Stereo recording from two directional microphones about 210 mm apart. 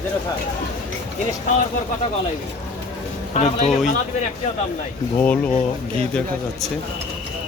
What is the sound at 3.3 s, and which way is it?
Speech, 35° left (ahead or behind).